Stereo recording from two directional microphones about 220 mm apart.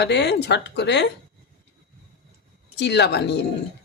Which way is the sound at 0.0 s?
50° left (ahead or behind).